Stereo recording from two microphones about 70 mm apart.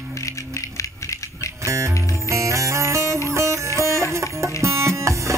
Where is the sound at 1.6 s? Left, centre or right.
Right.